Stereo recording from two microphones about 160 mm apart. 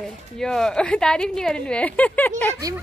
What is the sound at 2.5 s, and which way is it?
Speech, 20° right (ahead or behind).